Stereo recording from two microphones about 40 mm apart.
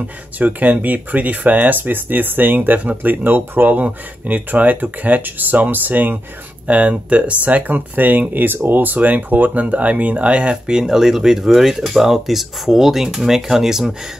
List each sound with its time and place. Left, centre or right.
0.4 s speech: right
6.9 s speech: right
7.7 s speech: right; by 13.9 s centre